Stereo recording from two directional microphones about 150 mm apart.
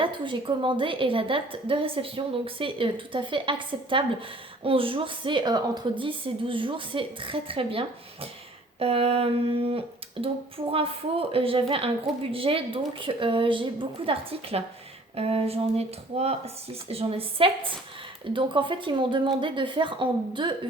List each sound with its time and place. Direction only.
0.0 s a woman's voice: 35° right (ahead or behind)